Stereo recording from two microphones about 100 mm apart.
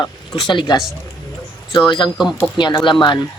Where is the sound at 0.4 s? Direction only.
50° left (ahead or behind).